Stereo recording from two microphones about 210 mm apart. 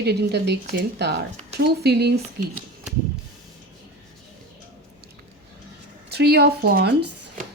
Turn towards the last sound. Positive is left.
turn(degrees=-45)  # may be behind; listen again after turning